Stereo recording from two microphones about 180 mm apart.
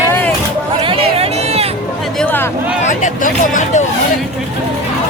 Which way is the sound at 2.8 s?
45° left (ahead or behind).